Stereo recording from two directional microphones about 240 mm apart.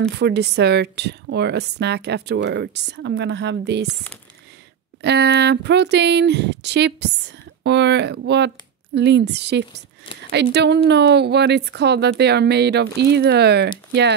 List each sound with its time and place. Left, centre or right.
0.2 s speech: right
3.8 s speech: centre
5.0 s speech: right